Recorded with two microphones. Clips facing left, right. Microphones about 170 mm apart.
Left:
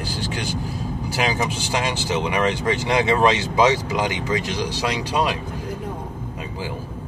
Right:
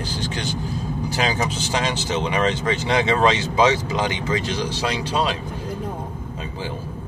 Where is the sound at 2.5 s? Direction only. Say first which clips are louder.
Left 1 dB; 20° right (ahead or behind).